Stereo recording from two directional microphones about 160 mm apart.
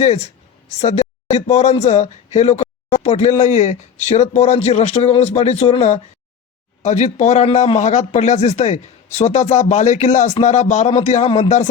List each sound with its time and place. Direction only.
0.0 s speech: 45° left (ahead or behind)